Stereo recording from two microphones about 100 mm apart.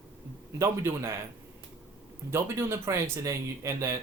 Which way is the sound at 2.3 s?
30° right (ahead or behind).